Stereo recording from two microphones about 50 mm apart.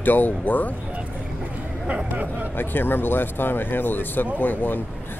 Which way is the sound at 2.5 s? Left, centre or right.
Left.